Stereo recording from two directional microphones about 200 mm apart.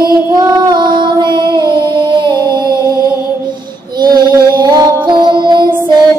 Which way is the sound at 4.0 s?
20° right (ahead or behind).